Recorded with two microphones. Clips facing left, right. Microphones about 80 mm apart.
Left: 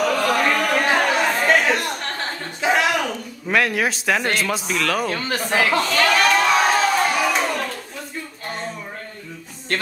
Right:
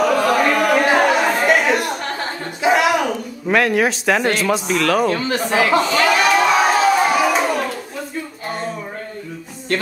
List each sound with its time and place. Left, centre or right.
0.0 s chatter: centre
3.5 s speech: centre
5.3 s a sound: centre